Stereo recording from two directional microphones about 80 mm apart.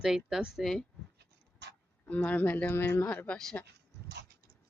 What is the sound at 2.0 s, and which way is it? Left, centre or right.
Speech, centre.